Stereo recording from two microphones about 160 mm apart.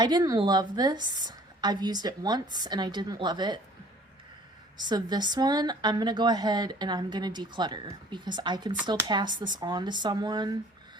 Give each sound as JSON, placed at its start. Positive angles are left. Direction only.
{"t": 0.0, "sound": "a woman's voice", "side_deg": -25}
{"t": 4.8, "sound": "a woman's voice", "side_deg": -25}